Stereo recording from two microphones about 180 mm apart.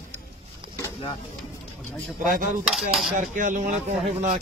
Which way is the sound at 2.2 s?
45° right (ahead or behind).